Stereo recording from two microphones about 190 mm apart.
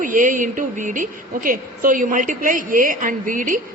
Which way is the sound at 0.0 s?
45° right (ahead or behind).